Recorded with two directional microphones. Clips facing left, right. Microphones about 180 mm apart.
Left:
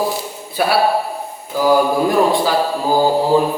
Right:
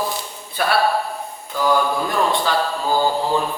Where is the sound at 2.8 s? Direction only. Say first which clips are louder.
Left 5 dB; 30° left (ahead or behind).